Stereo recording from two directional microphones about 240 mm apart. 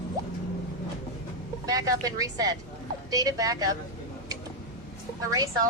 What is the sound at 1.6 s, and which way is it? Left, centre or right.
A woman's voice, centre.